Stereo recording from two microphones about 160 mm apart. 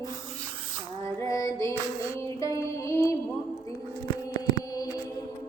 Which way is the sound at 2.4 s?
20° left (ahead or behind).